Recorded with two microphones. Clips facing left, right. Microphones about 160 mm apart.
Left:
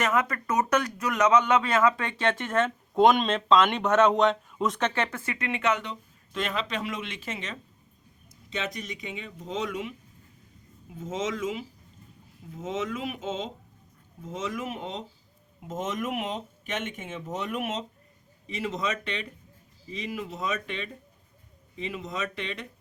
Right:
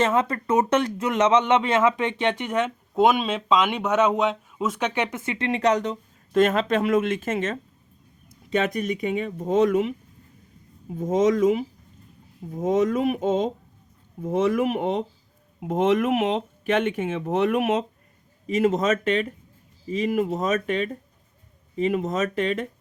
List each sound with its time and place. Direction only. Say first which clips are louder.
0.0 s speech: right 5 dB; 30° right (ahead or behind)
5.5 s speech: right 6 dB; 35° right (ahead or behind); by 17.8 s 65° right (ahead or behind)
18.4 s speech: right 10 dB; 50° right (ahead or behind)